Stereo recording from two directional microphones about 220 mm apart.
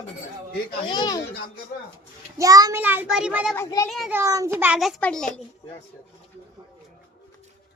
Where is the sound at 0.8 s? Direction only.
20° left (ahead or behind).